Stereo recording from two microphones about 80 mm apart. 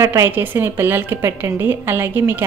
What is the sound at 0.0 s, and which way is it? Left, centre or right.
A woman's voice, right.